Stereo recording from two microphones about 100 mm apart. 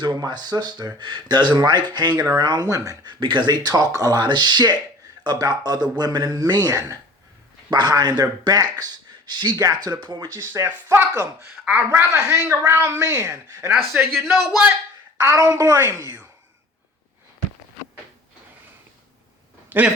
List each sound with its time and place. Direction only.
0.0 s speech: 45° right (ahead or behind)
2.6 s speech: 35° right (ahead or behind)
3.1 s speech: 55° right (ahead or behind)
10.3 s speech: 25° right (ahead or behind)
13.0 s speech: 30° right (ahead or behind)
14.3 s speech: centre (ahead or behind)
15.2 s speech: 30° right (ahead or behind)
15.8 s speech: 20° right (ahead or behind)
19.7 s a man's voice: 20° right (ahead or behind)